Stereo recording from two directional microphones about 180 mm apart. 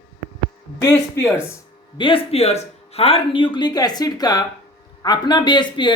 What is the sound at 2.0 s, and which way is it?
Speech, 30° left (ahead or behind).